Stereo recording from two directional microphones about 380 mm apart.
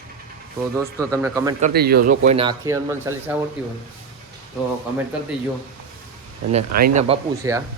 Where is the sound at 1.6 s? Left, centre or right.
Right; by 3.3 s centre.